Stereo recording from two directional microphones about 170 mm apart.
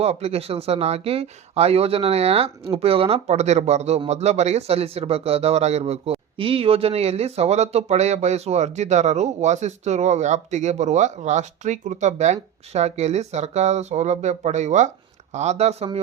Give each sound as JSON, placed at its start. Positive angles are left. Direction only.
{"t": 0.0, "sound": "speech", "side_deg": -35}